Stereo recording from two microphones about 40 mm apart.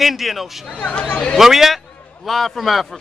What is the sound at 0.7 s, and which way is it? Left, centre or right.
Speech, left.